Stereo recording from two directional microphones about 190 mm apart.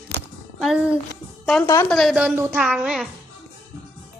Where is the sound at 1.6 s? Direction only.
15° left (ahead or behind).